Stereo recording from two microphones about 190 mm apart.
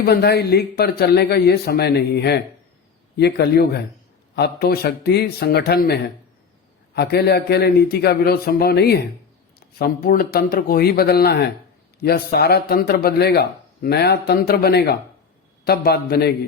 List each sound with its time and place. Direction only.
0.0 s speech: 55° left (ahead or behind)